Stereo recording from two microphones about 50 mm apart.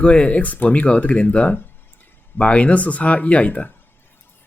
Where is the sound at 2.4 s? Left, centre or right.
Left.